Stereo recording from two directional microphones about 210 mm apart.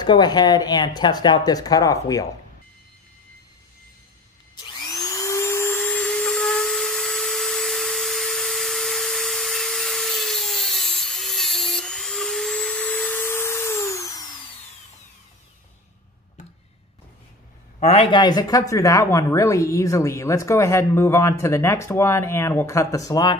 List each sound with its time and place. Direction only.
0.0 s speech: 20° left (ahead or behind)
4.6 s vacuum cleaner: 20° left (ahead or behind)
17.7 s speech: 30° left (ahead or behind)